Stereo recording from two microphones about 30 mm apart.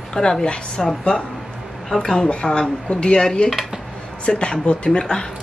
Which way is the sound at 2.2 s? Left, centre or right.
Left.